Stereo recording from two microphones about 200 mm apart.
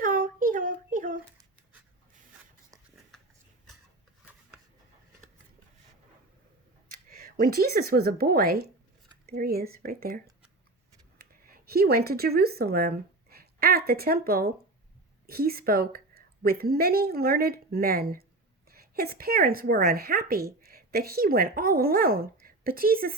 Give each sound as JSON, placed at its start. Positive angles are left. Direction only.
{"t": 0.0, "sound": "a sound", "side_deg": -45}
{"t": 6.9, "sound": "speech", "side_deg": -45}
{"t": 11.5, "sound": "a woman's voice", "side_deg": -50}